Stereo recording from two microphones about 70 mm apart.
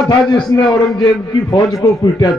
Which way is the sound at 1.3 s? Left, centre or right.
Left.